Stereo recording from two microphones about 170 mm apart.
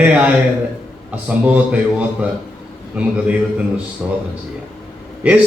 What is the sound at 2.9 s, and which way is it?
Speech, 5° right (ahead or behind).